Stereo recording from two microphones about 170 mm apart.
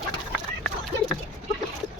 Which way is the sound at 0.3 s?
Centre (ahead or behind).